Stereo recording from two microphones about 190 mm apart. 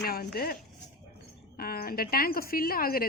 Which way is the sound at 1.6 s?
50° left (ahead or behind).